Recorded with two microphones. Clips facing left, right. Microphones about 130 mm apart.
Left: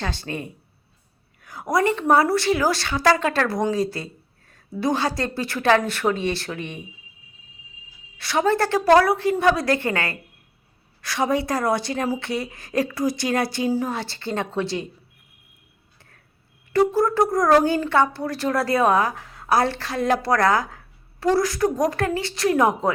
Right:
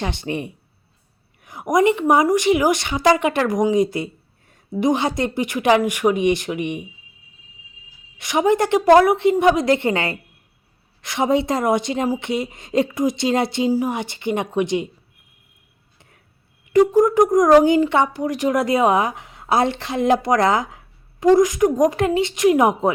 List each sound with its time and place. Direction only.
0.0 s a woman's voice: 20° right (ahead or behind)
8.2 s speech: 15° right (ahead or behind)
16.0 s a sound: 20° right (ahead or behind)
16.9 s speech: 15° right (ahead or behind)